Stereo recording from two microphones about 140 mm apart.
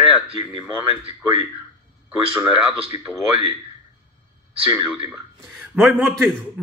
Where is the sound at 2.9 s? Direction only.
50° left (ahead or behind).